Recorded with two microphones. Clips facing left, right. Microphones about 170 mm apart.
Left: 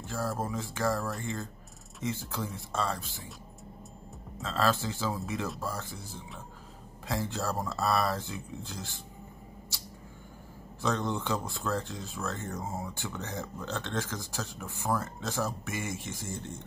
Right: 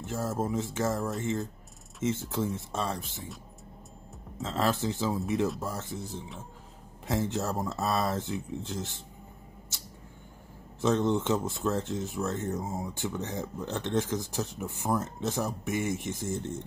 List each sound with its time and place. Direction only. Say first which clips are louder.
0.0 s speech: right 2 dB; 20° right (ahead or behind)
4.4 s speech: right 1 dB; 20° right (ahead or behind)
10.8 s speech: right 5 dB; 20° right (ahead or behind)